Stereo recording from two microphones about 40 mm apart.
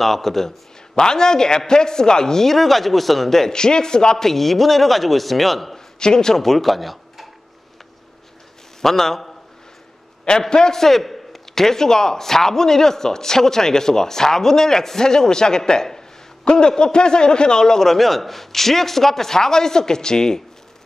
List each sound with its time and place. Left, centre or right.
0.0 s a man's voice: centre
5.9 s speech: centre
8.8 s a man's voice: centre
10.5 s a man's voice: centre